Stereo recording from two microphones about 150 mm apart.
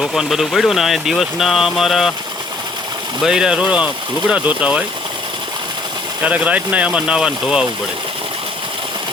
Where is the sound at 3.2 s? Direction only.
5° right (ahead or behind).